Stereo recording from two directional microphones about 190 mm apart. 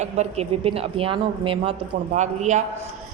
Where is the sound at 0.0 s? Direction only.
35° right (ahead or behind).